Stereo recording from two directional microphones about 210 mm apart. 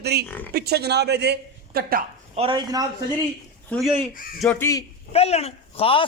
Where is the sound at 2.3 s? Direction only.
25° right (ahead or behind).